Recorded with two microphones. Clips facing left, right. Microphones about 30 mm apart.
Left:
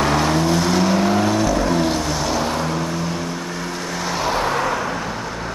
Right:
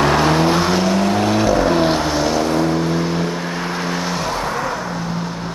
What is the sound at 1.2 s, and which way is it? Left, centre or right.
Vehicle, right.